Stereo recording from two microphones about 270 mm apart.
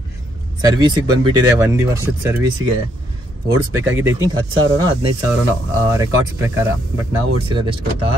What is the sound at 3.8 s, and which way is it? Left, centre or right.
Speech, centre.